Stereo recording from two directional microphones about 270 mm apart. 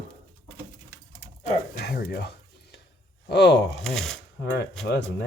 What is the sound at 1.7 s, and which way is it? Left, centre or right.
Dishes, left.